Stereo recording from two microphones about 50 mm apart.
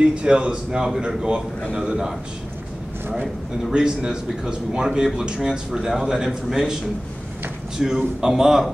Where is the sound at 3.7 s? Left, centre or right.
Centre.